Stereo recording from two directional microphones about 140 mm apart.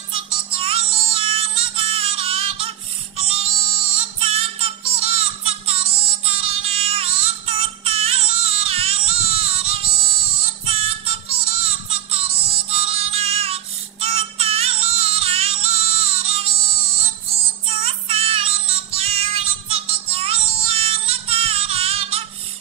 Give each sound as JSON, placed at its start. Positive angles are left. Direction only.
{"t": 0.1, "sound": "music", "side_deg": -40}
{"t": 17.6, "sound": "music", "side_deg": -45}